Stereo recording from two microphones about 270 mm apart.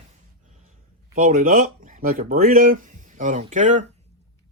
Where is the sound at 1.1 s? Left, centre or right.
Right.